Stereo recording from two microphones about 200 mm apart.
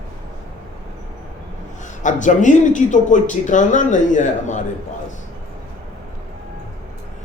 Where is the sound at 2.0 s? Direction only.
40° left (ahead or behind).